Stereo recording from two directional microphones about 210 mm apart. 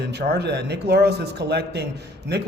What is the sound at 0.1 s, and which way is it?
A man's voice, 50° right (ahead or behind).